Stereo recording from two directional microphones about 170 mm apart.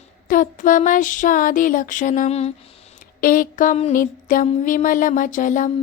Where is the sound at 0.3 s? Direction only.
50° left (ahead or behind).